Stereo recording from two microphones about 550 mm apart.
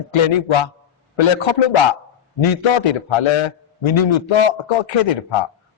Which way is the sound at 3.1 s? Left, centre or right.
Left.